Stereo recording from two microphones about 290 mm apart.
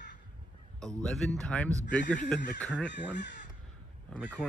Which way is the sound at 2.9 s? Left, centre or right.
Left.